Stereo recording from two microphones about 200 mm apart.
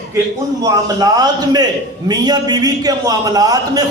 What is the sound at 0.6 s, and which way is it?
A man's voice, 20° right (ahead or behind).